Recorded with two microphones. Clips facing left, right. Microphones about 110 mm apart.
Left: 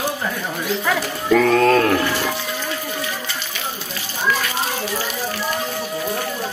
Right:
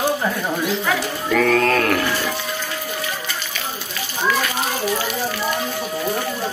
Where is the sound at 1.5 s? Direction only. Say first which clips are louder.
Left 2 dB; 20° left (ahead or behind).